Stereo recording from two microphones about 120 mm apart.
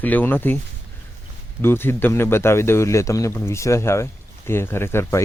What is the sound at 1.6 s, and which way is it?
Speech, 20° left (ahead or behind).